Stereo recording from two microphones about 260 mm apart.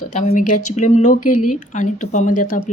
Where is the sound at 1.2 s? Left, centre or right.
Left.